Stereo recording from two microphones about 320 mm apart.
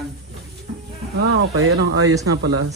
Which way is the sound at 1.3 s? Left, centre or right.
Right.